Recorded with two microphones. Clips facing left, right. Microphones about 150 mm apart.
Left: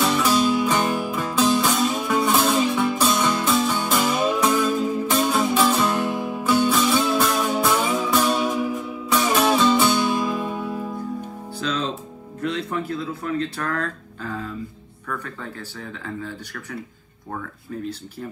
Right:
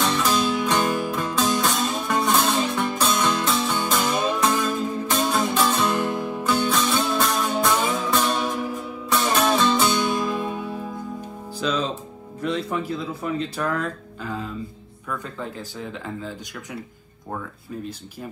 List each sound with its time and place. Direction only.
0.0 s music: 5° left (ahead or behind)
13.2 s speech: 15° right (ahead or behind)